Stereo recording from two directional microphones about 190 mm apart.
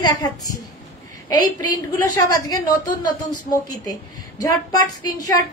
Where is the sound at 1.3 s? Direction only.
20° left (ahead or behind).